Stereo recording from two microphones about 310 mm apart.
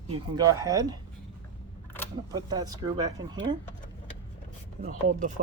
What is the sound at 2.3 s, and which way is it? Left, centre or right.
Speech, centre.